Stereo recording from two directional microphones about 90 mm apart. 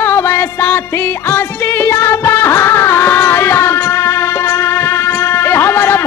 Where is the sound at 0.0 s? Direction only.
30° left (ahead or behind).